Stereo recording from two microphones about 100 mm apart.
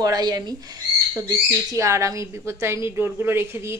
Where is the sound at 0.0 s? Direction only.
40° right (ahead or behind).